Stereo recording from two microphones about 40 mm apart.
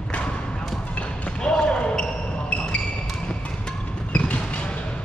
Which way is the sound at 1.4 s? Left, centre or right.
Left.